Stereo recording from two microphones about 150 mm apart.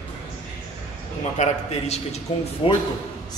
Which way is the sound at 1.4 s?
55° left (ahead or behind).